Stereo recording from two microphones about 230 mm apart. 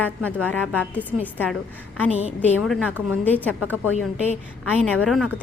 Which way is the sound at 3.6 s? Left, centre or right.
Centre.